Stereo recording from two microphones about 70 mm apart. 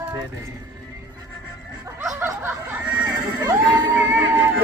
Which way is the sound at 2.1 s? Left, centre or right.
Right.